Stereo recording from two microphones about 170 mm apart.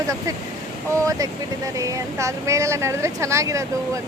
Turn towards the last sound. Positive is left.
turn(degrees=-20)  # may be behind; listen again after turning